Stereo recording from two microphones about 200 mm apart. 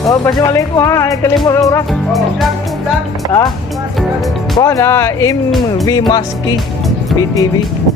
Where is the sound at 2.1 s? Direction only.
Centre (ahead or behind).